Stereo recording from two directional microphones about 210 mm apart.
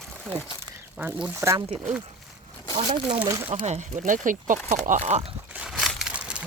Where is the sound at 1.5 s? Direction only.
25° right (ahead or behind).